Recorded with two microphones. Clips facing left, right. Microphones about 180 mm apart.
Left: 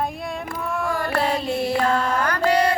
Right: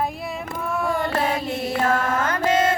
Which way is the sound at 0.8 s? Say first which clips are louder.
Right 1 dB; 20° right (ahead or behind).